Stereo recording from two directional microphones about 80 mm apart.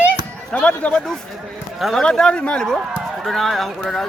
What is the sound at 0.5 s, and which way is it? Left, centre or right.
Speech, centre.